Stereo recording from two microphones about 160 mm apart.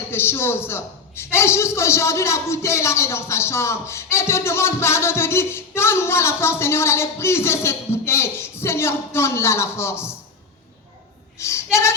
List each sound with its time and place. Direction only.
0.1 s a man's voice: 15° left (ahead or behind)
11.3 s speech: 20° left (ahead or behind)